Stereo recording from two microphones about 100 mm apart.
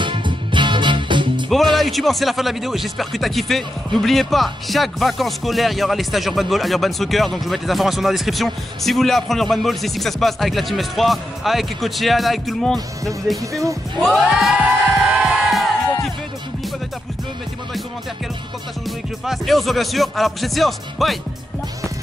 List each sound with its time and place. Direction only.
0.0 s music: 50° right (ahead or behind)
1.5 s speech: centre (ahead or behind)
14.9 s crowd: 5° right (ahead or behind)
18.9 s speech: centre (ahead or behind)